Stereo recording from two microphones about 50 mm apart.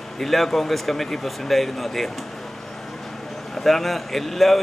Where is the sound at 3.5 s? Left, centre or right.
Centre.